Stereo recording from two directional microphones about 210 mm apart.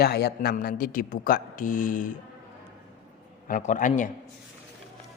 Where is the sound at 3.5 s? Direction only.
35° left (ahead or behind).